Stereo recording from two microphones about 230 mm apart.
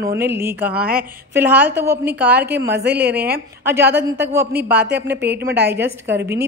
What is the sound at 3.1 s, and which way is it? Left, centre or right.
Speech, right.